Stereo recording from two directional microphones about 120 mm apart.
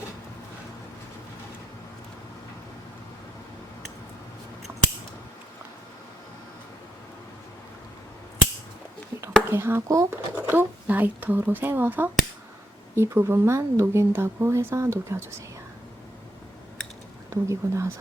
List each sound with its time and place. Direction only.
9.5 s speech: 20° right (ahead or behind)
17.2 s speech: 25° right (ahead or behind)